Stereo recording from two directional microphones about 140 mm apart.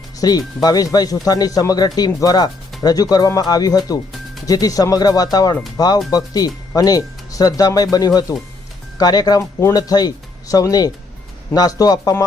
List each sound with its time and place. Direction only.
0.2 s speech: 25° left (ahead or behind)